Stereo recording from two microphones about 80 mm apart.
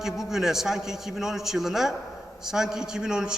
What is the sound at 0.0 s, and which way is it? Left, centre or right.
A man's voice, centre.